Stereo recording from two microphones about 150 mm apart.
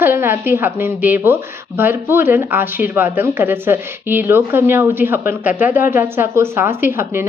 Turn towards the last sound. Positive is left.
turn(degrees=-15)  # may be behind; listen again after turning